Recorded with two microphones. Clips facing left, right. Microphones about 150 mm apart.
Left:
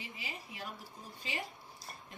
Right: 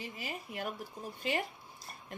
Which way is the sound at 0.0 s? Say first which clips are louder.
Right 5 dB; 50° right (ahead or behind).